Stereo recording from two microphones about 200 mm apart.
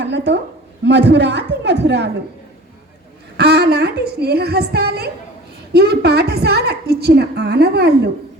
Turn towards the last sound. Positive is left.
turn(degrees=-55)  # may be behind; listen again after turning